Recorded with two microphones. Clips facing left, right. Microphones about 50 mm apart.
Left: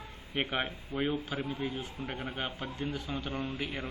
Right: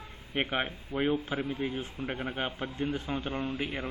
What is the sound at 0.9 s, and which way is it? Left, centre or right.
A man's voice, right.